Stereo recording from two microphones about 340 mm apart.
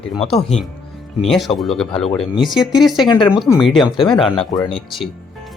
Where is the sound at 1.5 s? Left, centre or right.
Centre.